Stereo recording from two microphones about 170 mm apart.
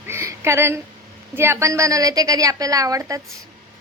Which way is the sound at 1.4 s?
15° right (ahead or behind).